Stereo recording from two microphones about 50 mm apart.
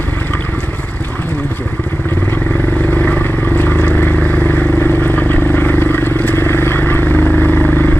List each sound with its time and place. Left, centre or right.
2.9 s vehicle: left
4.8 s vehicle: left